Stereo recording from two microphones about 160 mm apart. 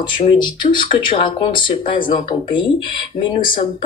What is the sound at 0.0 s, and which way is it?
Speech, 30° left (ahead or behind).